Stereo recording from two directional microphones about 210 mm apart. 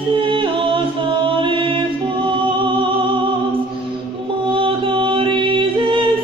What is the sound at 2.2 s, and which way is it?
Music, 25° right (ahead or behind).